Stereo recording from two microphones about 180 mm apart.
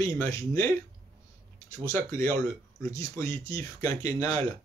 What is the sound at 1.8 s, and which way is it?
Speech, 15° left (ahead or behind).